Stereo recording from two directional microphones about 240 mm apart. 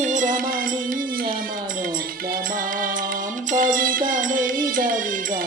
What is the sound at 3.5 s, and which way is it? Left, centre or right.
Music, right.